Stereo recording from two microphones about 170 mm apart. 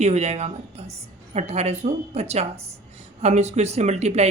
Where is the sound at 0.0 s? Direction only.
40° right (ahead or behind).